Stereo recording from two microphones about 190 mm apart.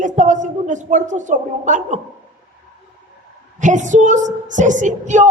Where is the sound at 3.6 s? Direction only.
40° right (ahead or behind).